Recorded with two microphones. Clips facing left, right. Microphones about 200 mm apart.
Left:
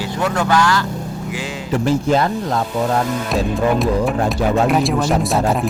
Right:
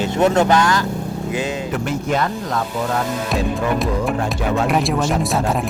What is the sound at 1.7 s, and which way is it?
Speech, 30° left (ahead or behind).